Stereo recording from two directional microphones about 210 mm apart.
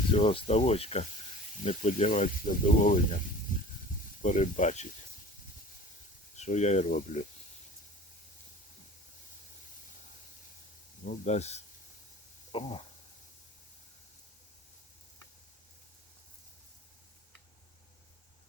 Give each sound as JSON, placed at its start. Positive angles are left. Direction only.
{"t": 0.1, "sound": "speech", "side_deg": 25}
{"t": 4.2, "sound": "speech", "side_deg": 35}
{"t": 6.3, "sound": "speech", "side_deg": 35}
{"t": 11.0, "sound": "speech", "side_deg": 35}